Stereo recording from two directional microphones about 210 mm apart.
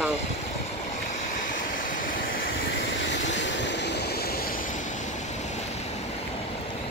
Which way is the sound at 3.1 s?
60° left (ahead or behind).